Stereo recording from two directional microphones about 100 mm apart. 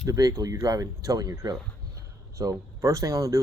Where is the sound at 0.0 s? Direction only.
35° right (ahead or behind).